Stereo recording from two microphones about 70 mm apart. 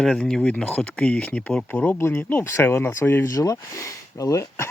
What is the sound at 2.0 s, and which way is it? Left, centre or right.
Speech, left.